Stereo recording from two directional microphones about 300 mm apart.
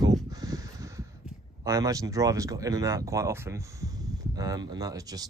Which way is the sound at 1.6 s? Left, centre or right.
Centre.